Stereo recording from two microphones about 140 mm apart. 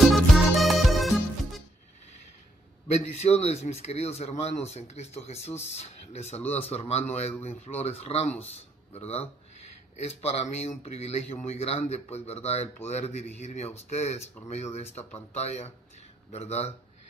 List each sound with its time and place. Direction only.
0.0 s music: centre (ahead or behind)
2.9 s speech: 50° left (ahead or behind)